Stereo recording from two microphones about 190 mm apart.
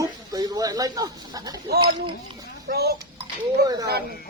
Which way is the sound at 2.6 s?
55° right (ahead or behind).